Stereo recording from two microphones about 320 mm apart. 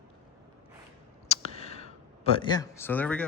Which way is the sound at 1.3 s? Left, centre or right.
Centre.